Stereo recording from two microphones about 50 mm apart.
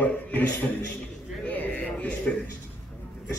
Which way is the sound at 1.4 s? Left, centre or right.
Left.